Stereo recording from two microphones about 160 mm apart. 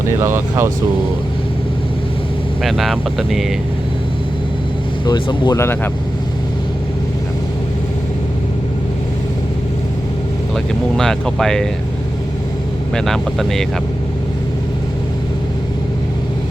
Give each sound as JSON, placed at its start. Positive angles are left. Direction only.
{"t": 0.2, "sound": "speech", "side_deg": -15}
{"t": 2.6, "sound": "speech", "side_deg": 0}
{"t": 5.0, "sound": "speech", "side_deg": 30}
{"t": 5.5, "sound": "speech", "side_deg": 15}
{"t": 10.5, "sound": "speech", "side_deg": 5}
{"t": 12.9, "sound": "speech", "side_deg": 0}